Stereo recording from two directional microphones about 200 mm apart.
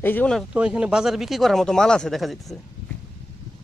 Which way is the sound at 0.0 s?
10° left (ahead or behind).